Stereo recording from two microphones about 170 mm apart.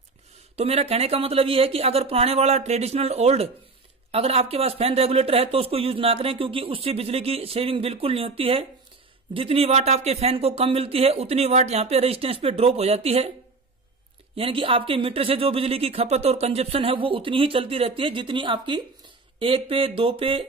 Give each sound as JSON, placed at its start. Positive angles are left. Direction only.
{"t": 0.6, "sound": "speech", "side_deg": -35}
{"t": 14.3, "sound": "speech", "side_deg": -30}